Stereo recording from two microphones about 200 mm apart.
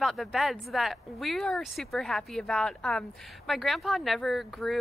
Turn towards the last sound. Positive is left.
turn(degrees=0)  # may be behind; listen again after turning